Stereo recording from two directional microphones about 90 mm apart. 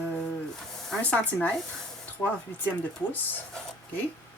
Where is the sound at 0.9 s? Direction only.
15° left (ahead or behind).